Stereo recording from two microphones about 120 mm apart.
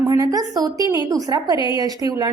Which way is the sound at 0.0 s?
30° right (ahead or behind).